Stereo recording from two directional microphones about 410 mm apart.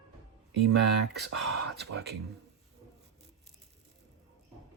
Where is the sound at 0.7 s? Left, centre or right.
Right.